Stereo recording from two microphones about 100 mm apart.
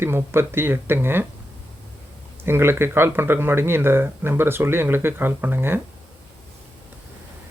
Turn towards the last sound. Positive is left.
turn(degrees=-20)  # may be behind; listen again after turning